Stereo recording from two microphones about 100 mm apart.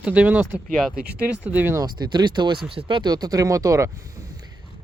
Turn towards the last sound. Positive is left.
turn(degrees=-35)  # may be behind; listen again after turning